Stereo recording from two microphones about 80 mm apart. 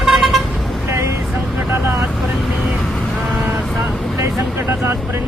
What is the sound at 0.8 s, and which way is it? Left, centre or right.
Vehicle, right.